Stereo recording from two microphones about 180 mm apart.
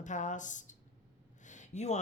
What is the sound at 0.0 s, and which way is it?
Speech, 45° left (ahead or behind).